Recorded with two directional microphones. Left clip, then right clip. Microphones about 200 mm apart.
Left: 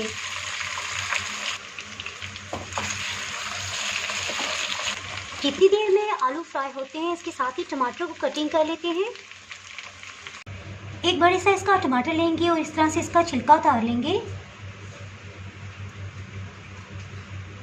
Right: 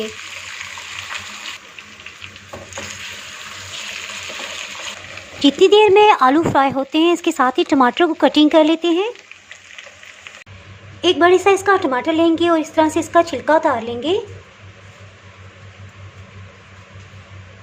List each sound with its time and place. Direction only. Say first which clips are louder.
5.4 s speech: right 9 dB; 35° right (ahead or behind)
11.0 s a woman's voice: right 7 dB; 45° right (ahead or behind)